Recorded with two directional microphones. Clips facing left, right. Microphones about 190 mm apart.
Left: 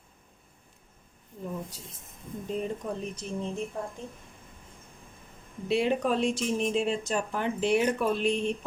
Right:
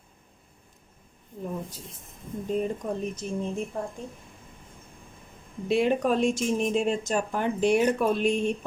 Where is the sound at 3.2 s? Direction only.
45° right (ahead or behind).